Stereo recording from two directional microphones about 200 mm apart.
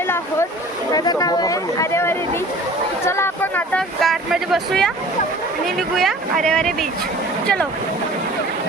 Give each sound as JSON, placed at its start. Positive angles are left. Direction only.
{"t": 0.9, "sound": "speech", "side_deg": 20}
{"t": 6.0, "sound": "speech", "side_deg": 0}